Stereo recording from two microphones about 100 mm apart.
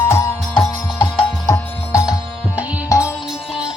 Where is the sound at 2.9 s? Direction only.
30° left (ahead or behind).